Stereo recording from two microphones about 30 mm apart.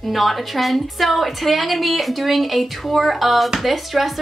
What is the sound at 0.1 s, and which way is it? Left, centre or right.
A woman's voice, centre.